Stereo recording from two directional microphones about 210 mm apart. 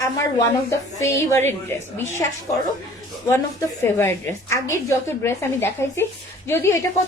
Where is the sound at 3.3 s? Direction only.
10° left (ahead or behind).